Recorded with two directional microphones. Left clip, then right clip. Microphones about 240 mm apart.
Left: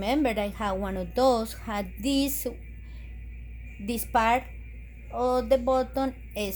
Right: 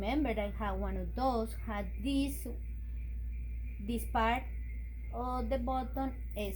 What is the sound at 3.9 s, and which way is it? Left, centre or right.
A woman's voice, left.